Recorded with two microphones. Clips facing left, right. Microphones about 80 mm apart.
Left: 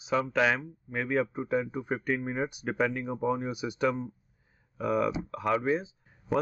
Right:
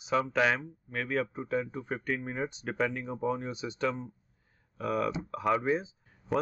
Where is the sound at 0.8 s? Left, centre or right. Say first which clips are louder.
Left 3 dB; centre.